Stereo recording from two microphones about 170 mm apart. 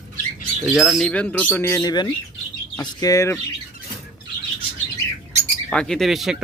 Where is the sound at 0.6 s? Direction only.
Centre (ahead or behind); by 3.3 s 20° left (ahead or behind).